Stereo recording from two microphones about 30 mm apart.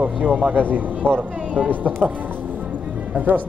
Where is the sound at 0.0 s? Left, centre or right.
Right.